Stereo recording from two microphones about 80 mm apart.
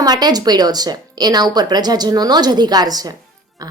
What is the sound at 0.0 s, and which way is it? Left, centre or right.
Speech, right.